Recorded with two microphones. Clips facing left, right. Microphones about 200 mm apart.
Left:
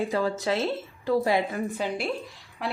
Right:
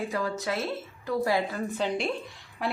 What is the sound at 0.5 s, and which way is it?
Speech, centre (ahead or behind).